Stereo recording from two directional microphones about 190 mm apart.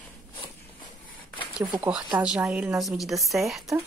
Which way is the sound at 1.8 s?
5° right (ahead or behind).